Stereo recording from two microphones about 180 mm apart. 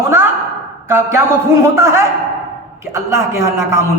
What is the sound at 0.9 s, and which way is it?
A man's voice, 15° right (ahead or behind).